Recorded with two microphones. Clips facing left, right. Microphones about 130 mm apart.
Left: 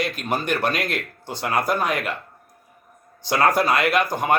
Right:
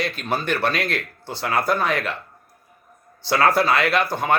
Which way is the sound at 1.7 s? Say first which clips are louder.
Right 1 dB; 10° left (ahead or behind).